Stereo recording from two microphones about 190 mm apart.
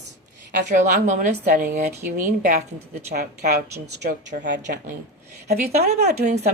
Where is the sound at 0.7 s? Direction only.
40° right (ahead or behind).